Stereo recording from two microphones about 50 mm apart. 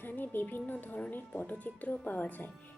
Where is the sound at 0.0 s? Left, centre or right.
Left.